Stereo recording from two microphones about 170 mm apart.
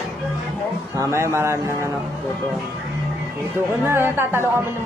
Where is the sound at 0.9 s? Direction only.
15° right (ahead or behind).